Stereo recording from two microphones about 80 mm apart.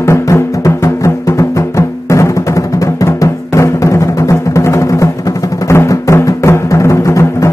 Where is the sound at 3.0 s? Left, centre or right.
Left.